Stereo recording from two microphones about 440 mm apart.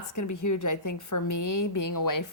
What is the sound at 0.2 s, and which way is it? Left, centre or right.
Speech, left.